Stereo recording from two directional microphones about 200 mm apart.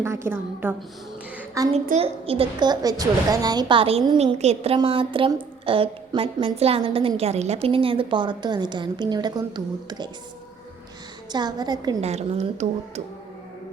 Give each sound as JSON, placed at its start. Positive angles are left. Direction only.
{"t": 0.0, "sound": "a woman's voice", "side_deg": -15}
{"t": 1.4, "sound": "a sound", "side_deg": -15}
{"t": 1.7, "sound": "a woman's voice", "side_deg": -30}
{"t": 11.3, "sound": "a woman's voice", "side_deg": -20}
{"t": 11.9, "sound": "a woman's voice", "side_deg": -30}